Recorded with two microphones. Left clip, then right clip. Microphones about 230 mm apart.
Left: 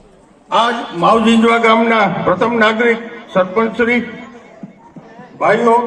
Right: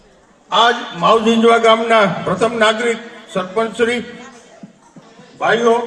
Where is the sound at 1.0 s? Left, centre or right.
Right.